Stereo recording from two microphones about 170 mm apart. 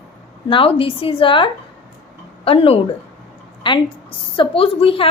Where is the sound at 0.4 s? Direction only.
30° left (ahead or behind).